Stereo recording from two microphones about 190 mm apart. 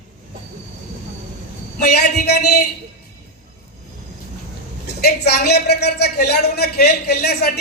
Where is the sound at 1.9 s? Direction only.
60° left (ahead or behind).